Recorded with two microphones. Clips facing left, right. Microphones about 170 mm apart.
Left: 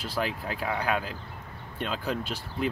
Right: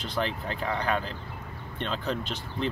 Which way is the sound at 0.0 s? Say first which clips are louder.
Even; 5° left (ahead or behind).